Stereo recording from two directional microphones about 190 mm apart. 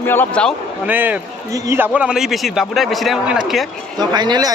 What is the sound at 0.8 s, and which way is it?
A man's voice, 10° right (ahead or behind).